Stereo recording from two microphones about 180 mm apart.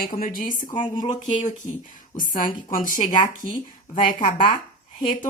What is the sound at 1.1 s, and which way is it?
Speech, 45° left (ahead or behind).